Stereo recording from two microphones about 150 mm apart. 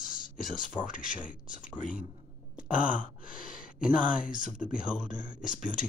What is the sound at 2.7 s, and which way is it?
Speech, 10° right (ahead or behind).